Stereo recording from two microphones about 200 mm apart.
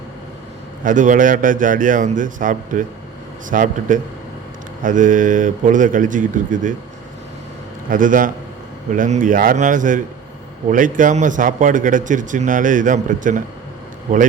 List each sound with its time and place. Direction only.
0.9 s a man's voice: 40° right (ahead or behind)
7.9 s a man's voice: 40° right (ahead or behind)